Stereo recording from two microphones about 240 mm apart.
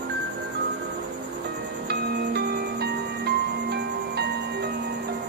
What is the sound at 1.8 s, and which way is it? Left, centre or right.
Music, right.